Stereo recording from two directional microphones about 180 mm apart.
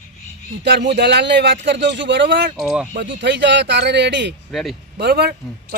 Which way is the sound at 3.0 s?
75° right (ahead or behind).